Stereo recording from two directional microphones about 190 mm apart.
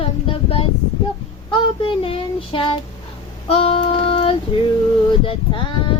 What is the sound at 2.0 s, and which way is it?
Child singing, 30° left (ahead or behind).